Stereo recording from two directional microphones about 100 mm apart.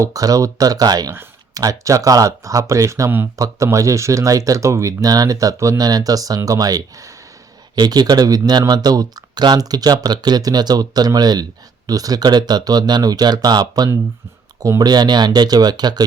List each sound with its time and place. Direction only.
0.0 s speech: 35° right (ahead or behind)